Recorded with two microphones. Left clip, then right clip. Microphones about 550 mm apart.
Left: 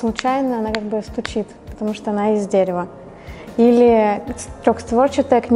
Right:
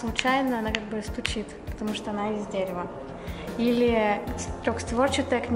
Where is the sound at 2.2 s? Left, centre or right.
Left.